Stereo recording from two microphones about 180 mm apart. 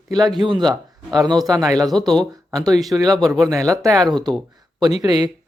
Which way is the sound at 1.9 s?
5° left (ahead or behind).